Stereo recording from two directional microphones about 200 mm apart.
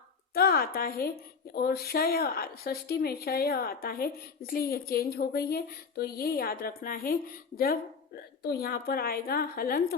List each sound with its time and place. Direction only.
0.3 s speech: 50° left (ahead or behind)